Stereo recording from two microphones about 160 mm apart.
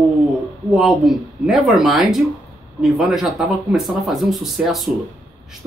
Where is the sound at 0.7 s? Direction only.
Centre (ahead or behind).